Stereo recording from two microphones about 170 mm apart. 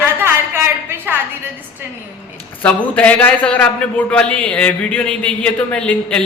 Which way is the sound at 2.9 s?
10° left (ahead or behind).